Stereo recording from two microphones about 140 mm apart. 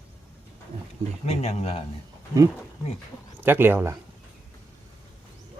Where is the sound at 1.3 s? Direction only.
50° left (ahead or behind).